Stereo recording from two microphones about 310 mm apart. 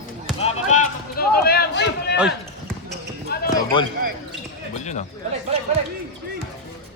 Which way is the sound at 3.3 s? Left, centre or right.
Left.